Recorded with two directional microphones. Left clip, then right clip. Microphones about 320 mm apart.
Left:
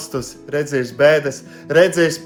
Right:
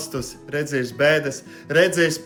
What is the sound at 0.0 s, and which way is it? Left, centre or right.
A man's voice, centre.